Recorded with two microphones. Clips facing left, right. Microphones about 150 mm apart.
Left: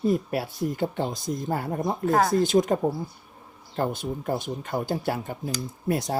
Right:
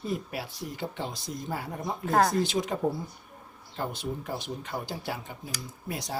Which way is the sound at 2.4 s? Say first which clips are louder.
Left 7 dB; 45° left (ahead or behind).